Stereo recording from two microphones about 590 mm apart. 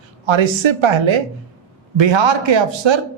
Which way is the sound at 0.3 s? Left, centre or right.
Right.